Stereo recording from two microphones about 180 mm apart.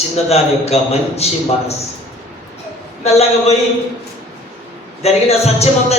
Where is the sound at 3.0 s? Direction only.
35° left (ahead or behind).